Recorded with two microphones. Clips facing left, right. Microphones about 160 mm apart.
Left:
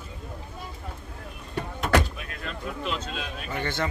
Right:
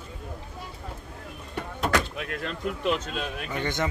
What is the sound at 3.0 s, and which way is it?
Speech, 50° right (ahead or behind).